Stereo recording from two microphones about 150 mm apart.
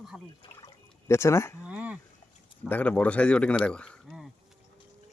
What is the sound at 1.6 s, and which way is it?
Speech, 10° right (ahead or behind).